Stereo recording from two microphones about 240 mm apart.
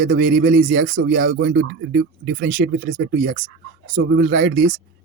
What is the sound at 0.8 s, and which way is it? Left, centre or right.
Speech, right.